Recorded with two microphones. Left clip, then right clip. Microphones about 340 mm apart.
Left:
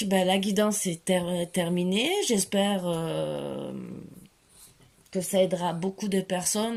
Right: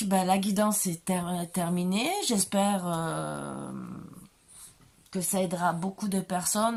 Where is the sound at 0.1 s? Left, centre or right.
Right.